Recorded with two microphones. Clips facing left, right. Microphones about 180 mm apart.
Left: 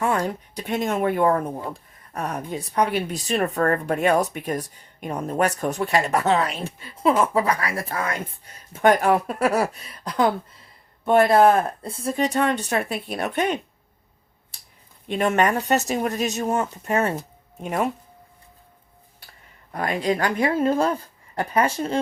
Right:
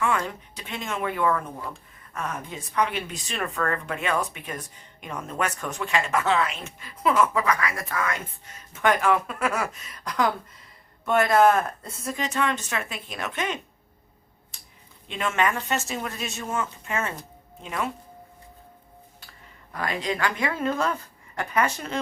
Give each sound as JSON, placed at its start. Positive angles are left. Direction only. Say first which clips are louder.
{"t": 0.0, "sound": "speech", "louder": "left 3 dB", "side_deg": 40}
{"t": 15.0, "sound": "speech", "louder": "left 5 dB", "side_deg": 45}
{"t": 19.9, "sound": "speech", "louder": "left 5 dB", "side_deg": 40}